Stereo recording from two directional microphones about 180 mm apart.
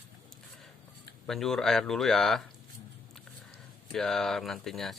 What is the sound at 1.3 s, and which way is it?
Speech, centre (ahead or behind).